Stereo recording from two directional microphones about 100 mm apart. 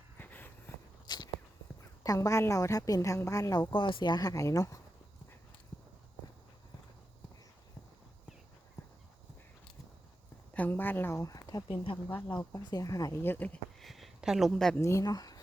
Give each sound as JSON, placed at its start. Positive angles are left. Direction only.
{"t": 0.2, "sound": "a sound", "side_deg": 15}
{"t": 1.0, "sound": "walk", "side_deg": 45}
{"t": 2.0, "sound": "a woman's voice", "side_deg": 35}
{"t": 3.7, "sound": "a woman's voice", "side_deg": 55}
{"t": 10.5, "sound": "a woman's voice", "side_deg": 15}
{"t": 11.2, "sound": "speech", "side_deg": 35}
{"t": 11.7, "sound": "speech", "side_deg": 65}
{"t": 12.5, "sound": "a woman's voice", "side_deg": 35}
{"t": 13.2, "sound": "speech", "side_deg": 15}
{"t": 13.7, "sound": "a sound", "side_deg": 0}
{"t": 14.8, "sound": "a woman's voice", "side_deg": 30}